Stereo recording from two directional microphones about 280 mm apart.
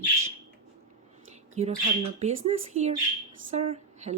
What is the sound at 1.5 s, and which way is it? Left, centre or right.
A woman's voice, right.